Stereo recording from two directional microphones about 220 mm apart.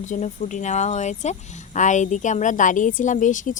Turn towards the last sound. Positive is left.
turn(degrees=35)  # may be behind; listen again after turning